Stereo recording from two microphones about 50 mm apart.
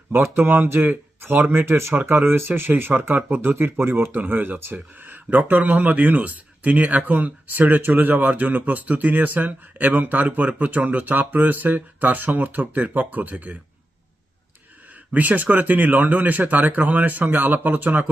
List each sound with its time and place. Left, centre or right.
0.1 s speech: right
15.1 s speech: right